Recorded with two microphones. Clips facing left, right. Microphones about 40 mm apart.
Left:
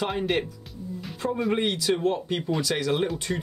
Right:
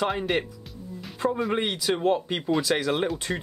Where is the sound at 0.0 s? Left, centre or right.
Centre.